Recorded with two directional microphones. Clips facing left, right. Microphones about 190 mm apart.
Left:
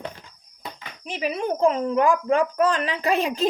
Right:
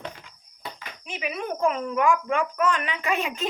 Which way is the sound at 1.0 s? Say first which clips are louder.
Left 5 dB; 35° left (ahead or behind).